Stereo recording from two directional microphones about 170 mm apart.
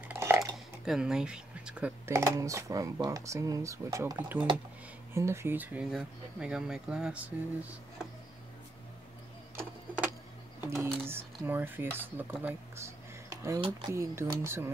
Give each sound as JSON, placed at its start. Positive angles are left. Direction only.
{"t": 0.1, "sound": "dishes", "side_deg": -15}
{"t": 0.8, "sound": "speech", "side_deg": -5}
{"t": 2.0, "sound": "speech", "side_deg": -15}
{"t": 10.6, "sound": "speech", "side_deg": -15}